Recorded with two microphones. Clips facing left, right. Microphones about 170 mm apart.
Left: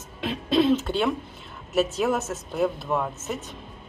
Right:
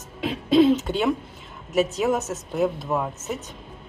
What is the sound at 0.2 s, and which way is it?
Throat clearing, 10° right (ahead or behind).